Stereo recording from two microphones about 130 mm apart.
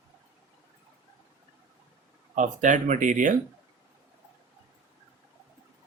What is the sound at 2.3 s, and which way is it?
Speech, 75° right (ahead or behind).